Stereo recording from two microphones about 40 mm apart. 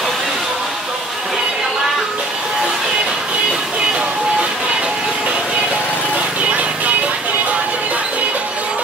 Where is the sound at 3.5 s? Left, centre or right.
Right.